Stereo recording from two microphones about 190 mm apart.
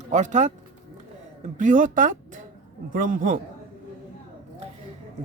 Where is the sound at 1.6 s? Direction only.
40° right (ahead or behind).